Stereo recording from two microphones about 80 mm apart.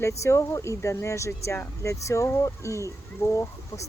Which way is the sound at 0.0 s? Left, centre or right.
Left.